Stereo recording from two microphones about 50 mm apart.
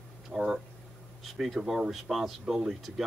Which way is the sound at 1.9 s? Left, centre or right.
Centre.